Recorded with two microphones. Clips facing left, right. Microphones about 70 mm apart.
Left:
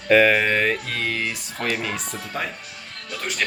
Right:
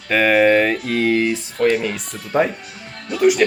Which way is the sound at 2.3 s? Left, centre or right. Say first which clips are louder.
Right 12 dB; right.